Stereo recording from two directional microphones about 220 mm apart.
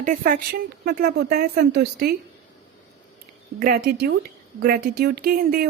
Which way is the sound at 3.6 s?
45° right (ahead or behind).